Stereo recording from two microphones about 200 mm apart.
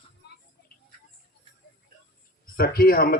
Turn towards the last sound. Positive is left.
turn(degrees=50)  # may be behind; listen again after turning